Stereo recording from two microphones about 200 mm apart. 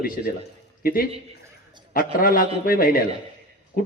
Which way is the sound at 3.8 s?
45° left (ahead or behind).